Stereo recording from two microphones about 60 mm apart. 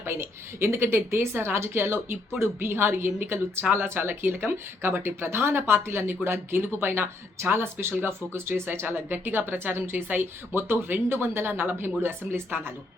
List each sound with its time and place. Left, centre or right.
0.0 s a woman's voice: right